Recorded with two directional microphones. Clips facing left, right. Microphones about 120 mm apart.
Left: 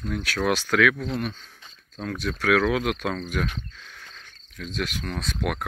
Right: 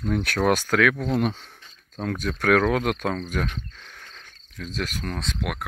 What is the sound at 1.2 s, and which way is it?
Speech, 70° right (ahead or behind).